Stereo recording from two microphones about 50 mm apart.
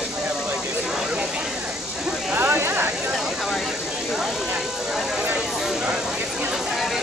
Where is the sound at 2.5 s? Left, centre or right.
Right.